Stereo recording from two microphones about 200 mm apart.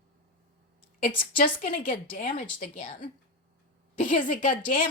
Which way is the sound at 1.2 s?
45° left (ahead or behind).